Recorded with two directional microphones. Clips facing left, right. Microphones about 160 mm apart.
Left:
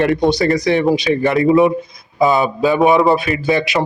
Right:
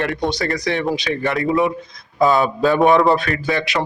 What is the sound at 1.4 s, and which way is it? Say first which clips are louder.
Speech: left 6 dB; 20° left (ahead or behind).